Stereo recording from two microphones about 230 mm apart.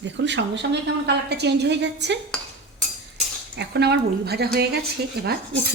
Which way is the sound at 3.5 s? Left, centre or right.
Right.